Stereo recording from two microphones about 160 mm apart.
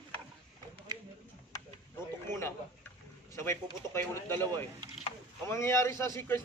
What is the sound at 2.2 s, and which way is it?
A man's voice, 15° left (ahead or behind).